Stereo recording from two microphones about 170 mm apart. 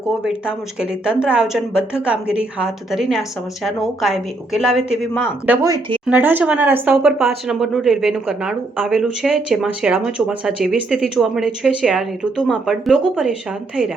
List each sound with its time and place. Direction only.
0.2 s a woman's voice: 5° right (ahead or behind)
5.6 s speech: 25° right (ahead or behind)
6.1 s a woman's voice: 10° right (ahead or behind)